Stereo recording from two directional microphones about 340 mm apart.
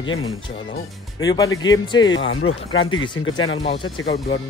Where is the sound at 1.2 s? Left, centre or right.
Centre.